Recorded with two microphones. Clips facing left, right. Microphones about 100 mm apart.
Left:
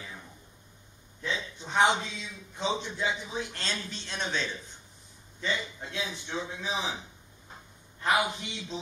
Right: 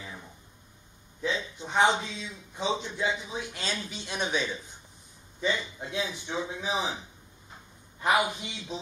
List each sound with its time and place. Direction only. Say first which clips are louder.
1.2 s a sound: right 3 dB; 15° right (ahead or behind)
2.1 s a man's voice: right 3 dB; 15° right (ahead or behind)
8.0 s a man's voice: right 2 dB; 15° right (ahead or behind)